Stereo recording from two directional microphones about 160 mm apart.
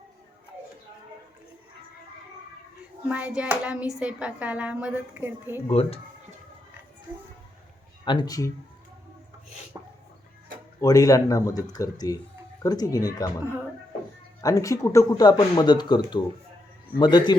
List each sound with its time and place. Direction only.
3.1 s speech: 10° right (ahead or behind)
5.6 s speech: 35° left (ahead or behind)
8.0 s speech: 25° left (ahead or behind)
9.7 s dog: 20° right (ahead or behind)
10.8 s speech: 20° left (ahead or behind)
14.4 s speech: 20° left (ahead or behind)